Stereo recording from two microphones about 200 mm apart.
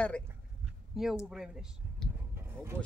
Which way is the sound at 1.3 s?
Centre (ahead or behind).